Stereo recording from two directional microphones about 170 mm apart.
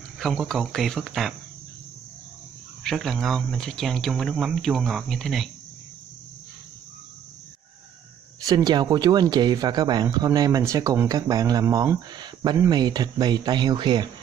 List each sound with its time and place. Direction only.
0.2 s speech: centre (ahead or behind)
2.8 s speech: centre (ahead or behind)
8.4 s speech: 20° right (ahead or behind)